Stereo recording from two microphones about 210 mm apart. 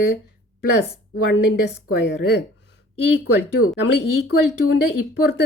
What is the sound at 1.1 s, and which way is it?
Speech, 50° left (ahead or behind).